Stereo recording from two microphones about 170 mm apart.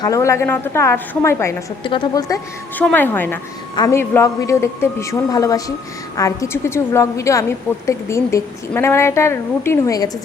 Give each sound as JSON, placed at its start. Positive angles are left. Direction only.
{"t": 0.0, "sound": "a woman's voice", "side_deg": 20}
{"t": 1.8, "sound": "a woman's voice", "side_deg": 25}
{"t": 2.7, "sound": "a woman's voice", "side_deg": 10}